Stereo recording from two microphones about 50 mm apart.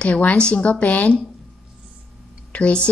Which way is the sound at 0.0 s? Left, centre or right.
Left.